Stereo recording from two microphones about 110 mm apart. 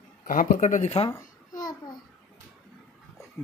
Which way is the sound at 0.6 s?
90° left.